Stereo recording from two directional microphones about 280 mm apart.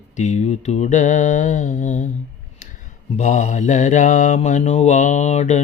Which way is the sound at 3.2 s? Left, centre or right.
Left.